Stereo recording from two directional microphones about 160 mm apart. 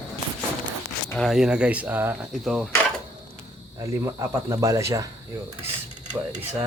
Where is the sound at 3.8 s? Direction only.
20° right (ahead or behind).